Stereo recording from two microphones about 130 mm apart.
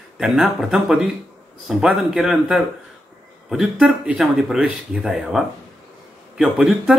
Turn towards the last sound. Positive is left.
turn(degrees=-5)  # may be behind; listen again after turning